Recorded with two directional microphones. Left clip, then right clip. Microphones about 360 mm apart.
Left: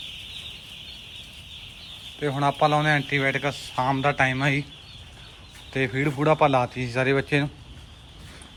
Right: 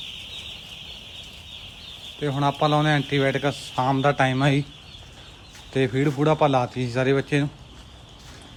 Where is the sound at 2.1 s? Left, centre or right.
Centre.